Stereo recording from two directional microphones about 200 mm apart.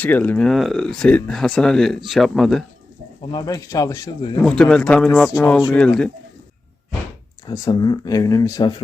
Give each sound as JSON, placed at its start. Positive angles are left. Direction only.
{"t": 0.0, "sound": "speech", "side_deg": 10}
{"t": 3.2, "sound": "speech", "side_deg": 20}
{"t": 4.4, "sound": "speech", "side_deg": 5}
{"t": 7.4, "sound": "speech", "side_deg": 20}